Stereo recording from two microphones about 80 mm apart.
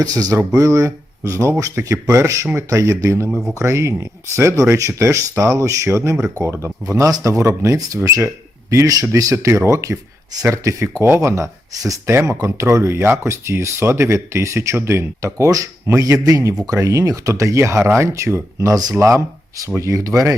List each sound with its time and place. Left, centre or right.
0.0 s speech: right